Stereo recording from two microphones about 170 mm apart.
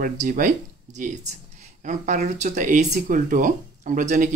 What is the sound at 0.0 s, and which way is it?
Speech, 50° right (ahead or behind).